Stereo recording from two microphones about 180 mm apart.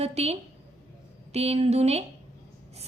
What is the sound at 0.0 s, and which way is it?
A woman's voice, 35° right (ahead or behind).